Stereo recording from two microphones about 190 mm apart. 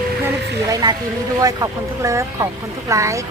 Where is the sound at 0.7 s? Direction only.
20° right (ahead or behind).